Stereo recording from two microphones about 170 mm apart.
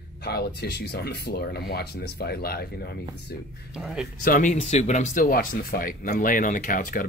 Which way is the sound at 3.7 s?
5° right (ahead or behind).